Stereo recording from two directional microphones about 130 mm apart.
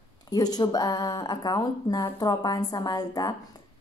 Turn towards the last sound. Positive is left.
turn(degrees=30)  # may be behind; listen again after turning